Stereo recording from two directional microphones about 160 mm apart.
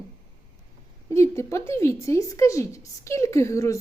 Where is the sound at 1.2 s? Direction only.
15° left (ahead or behind).